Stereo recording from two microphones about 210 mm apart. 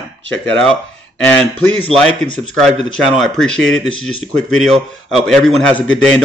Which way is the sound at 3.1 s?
Centre (ahead or behind).